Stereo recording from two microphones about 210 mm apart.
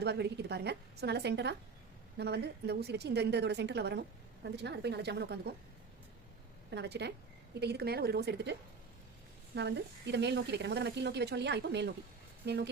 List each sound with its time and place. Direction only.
0.0 s a woman's voice: 50° right (ahead or behind)
6.7 s a woman's voice: 55° right (ahead or behind)
9.6 s a woman's voice: 55° right (ahead or behind)